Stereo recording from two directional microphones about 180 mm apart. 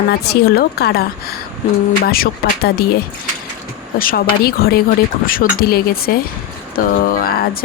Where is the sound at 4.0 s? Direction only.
55° left (ahead or behind).